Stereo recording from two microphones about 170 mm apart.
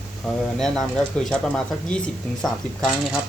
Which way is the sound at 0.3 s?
Centre (ahead or behind).